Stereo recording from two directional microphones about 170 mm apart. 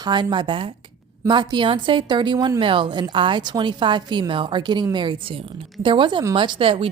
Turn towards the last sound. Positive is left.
turn(degrees=-30)  # may be behind; listen again after turning